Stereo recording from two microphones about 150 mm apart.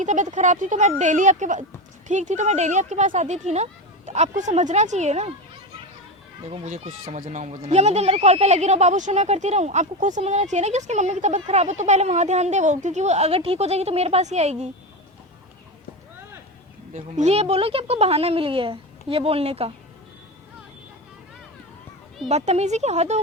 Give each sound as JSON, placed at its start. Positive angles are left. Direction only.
{"t": 0.0, "sound": "speech", "side_deg": -55}
{"t": 6.5, "sound": "speech", "side_deg": -45}
{"t": 16.9, "sound": "speech", "side_deg": -50}
{"t": 22.3, "sound": "speech", "side_deg": -50}